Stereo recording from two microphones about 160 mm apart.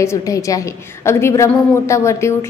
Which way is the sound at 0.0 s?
20° left (ahead or behind).